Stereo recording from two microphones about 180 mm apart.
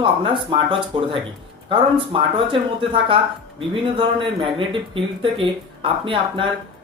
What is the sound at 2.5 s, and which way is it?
Speech, 30° right (ahead or behind).